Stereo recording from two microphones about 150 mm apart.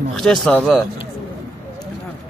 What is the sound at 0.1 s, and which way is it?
Speech, 5° left (ahead or behind).